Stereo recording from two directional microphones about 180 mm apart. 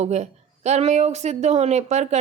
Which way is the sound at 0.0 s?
40° right (ahead or behind).